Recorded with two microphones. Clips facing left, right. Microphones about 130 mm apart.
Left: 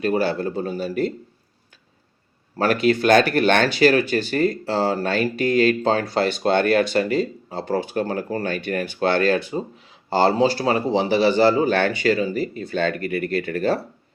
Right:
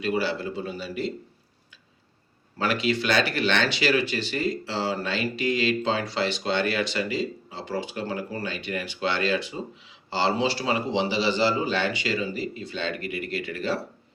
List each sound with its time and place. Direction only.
0.0 s speech: 45° left (ahead or behind)
2.6 s speech: 45° left (ahead or behind)